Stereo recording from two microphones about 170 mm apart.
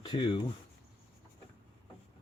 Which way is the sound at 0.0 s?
30° left (ahead or behind).